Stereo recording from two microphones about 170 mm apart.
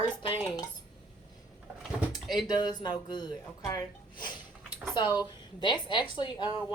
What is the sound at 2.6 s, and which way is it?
A woman's voice, 25° left (ahead or behind).